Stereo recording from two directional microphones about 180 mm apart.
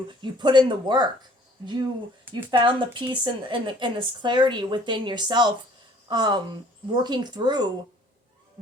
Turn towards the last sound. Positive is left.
turn(degrees=-25)  # may be behind; listen again after turning